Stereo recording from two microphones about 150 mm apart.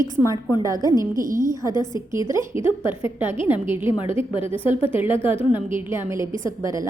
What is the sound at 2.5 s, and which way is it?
Speech, 35° left (ahead or behind).